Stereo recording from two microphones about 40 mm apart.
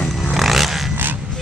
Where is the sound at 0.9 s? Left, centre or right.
Right.